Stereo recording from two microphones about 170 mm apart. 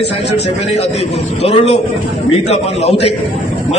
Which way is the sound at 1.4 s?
40° left (ahead or behind).